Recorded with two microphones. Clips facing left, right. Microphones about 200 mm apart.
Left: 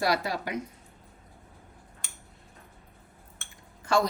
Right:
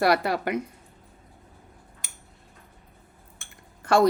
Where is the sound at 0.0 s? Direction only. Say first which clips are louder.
Right 5 dB; 60° right (ahead or behind).